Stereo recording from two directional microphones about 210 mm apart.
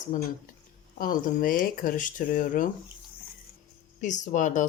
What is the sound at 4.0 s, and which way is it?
Speech, 35° left (ahead or behind).